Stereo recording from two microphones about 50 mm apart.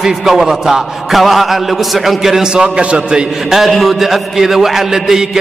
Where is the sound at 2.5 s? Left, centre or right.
Right.